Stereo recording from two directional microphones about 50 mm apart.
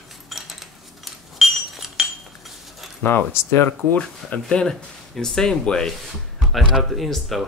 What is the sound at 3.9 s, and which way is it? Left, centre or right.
Speech, left.